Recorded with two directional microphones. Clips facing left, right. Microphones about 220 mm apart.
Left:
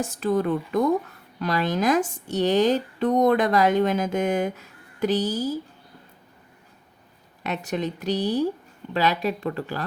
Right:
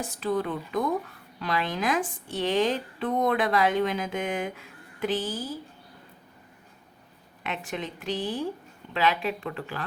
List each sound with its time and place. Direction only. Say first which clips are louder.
0.0 s speech: left 5 dB; 45° left (ahead or behind)
7.4 s a woman's voice: left 6 dB; 40° left (ahead or behind)